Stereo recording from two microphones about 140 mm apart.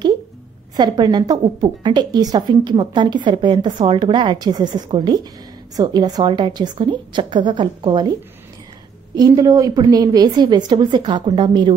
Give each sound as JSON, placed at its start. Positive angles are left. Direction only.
{"t": 0.7, "sound": "a woman's voice", "side_deg": -30}
{"t": 9.1, "sound": "a woman's voice", "side_deg": -25}